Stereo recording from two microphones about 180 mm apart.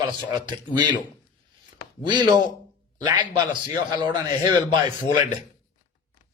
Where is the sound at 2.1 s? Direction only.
25° right (ahead or behind).